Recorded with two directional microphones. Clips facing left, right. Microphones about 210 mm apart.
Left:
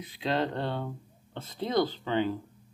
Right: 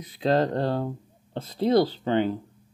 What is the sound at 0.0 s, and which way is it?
Speech, 40° right (ahead or behind).